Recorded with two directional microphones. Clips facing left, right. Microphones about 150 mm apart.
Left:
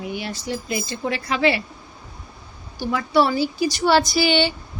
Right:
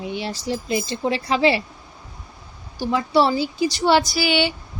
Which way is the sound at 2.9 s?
25° right (ahead or behind).